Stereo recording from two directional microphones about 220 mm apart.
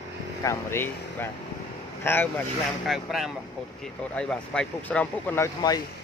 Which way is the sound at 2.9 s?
Centre (ahead or behind).